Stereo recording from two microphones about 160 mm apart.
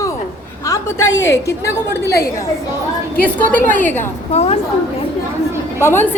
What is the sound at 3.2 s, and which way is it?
Speech, 10° left (ahead or behind).